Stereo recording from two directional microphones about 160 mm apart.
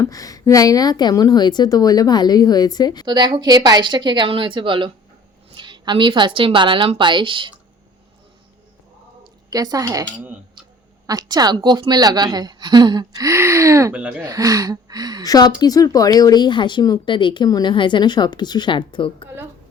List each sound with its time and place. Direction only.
0.0 s speech: 20° left (ahead or behind)
3.1 s a woman's voice: 25° right (ahead or behind)
9.5 s a woman's voice: 25° right (ahead or behind)
15.2 s speech: 25° left (ahead or behind)